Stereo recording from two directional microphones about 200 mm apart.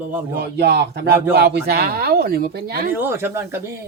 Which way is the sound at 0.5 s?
55° right (ahead or behind).